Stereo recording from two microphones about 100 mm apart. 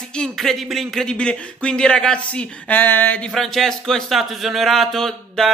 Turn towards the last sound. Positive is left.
turn(degrees=5)  # may be behind; listen again after turning